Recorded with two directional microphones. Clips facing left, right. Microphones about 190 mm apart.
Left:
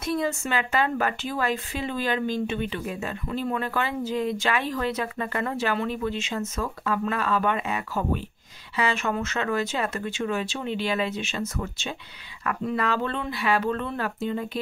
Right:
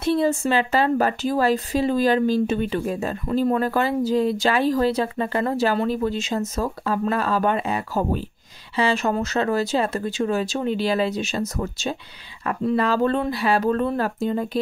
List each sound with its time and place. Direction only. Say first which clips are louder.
0.0 s a woman's voice: right 7 dB; 30° right (ahead or behind)